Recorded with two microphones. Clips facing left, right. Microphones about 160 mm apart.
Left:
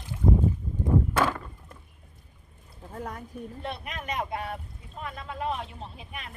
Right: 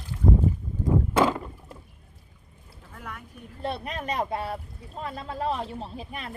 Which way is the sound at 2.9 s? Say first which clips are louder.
Left 5 dB; 35° left (ahead or behind).